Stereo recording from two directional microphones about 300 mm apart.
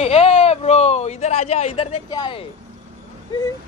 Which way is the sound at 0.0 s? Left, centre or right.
Centre.